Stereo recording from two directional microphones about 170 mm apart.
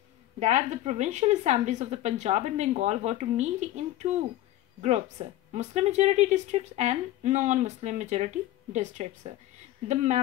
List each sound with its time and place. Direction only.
0.4 s speech: 45° right (ahead or behind)